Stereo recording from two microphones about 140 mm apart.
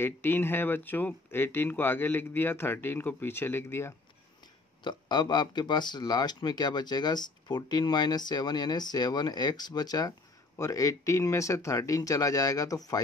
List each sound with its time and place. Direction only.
0.0 s speech: 15° left (ahead or behind)
4.8 s speech: 30° left (ahead or behind)